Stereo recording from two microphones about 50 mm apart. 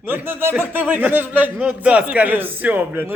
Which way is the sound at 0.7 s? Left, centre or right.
Right.